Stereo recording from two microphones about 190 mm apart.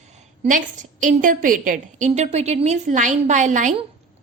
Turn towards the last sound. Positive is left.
turn(degrees=-40)  # may be behind; listen again after turning